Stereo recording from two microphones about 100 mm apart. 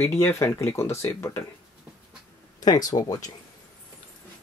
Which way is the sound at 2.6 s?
40° left (ahead or behind).